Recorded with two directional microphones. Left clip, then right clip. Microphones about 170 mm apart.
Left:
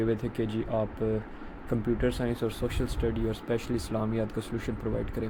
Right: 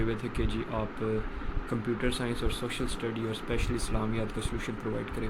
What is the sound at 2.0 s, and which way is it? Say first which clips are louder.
Speech: left 2 dB; 35° left (ahead or behind).